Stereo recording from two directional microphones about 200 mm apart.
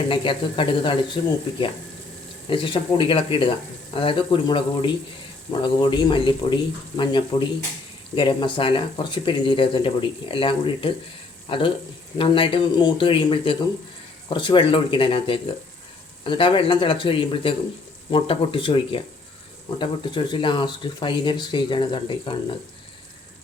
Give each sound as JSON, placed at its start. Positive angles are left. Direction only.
{"t": 0.1, "sound": "speech", "side_deg": 25}